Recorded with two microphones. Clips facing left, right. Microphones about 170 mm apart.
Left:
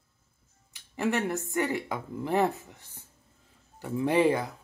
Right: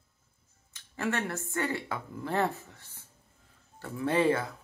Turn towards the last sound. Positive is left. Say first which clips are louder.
# left 2 dB
turn(degrees=15)  # may be behind; listen again after turning